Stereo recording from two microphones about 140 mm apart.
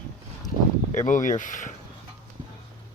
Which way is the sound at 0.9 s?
65° left (ahead or behind).